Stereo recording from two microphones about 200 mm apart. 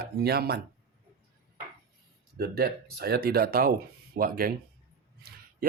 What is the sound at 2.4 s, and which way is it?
Speech, 50° right (ahead or behind).